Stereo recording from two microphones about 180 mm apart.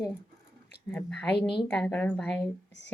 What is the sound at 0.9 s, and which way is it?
A woman's voice, 10° left (ahead or behind).